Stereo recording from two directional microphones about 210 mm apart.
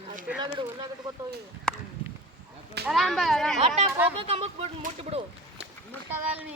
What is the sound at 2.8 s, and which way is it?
Speech, centre (ahead or behind).